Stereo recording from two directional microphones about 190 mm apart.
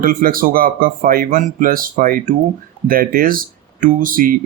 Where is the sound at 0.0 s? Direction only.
50° right (ahead or behind).